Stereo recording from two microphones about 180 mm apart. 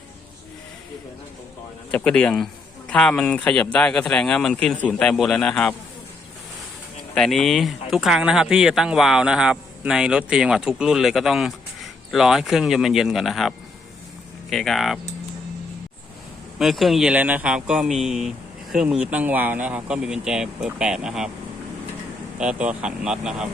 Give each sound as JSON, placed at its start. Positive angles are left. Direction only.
{"t": 1.9, "sound": "a man's voice", "side_deg": 5}
{"t": 7.1, "sound": "a man's voice", "side_deg": 0}
{"t": 14.5, "sound": "a man's voice", "side_deg": 0}
{"t": 16.6, "sound": "a man's voice", "side_deg": 0}
{"t": 22.4, "sound": "a man's voice", "side_deg": -5}